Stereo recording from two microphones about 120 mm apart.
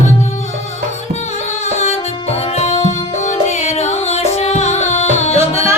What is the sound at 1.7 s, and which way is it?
Music, 65° left (ahead or behind).